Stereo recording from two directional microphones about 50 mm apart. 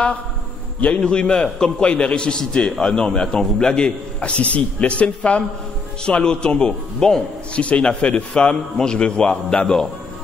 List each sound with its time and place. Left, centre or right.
0.7 s a man's voice: left